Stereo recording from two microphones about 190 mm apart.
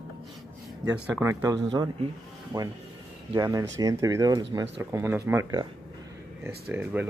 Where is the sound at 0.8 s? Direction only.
10° right (ahead or behind).